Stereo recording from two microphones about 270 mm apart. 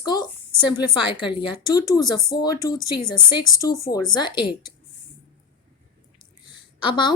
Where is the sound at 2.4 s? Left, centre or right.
Centre.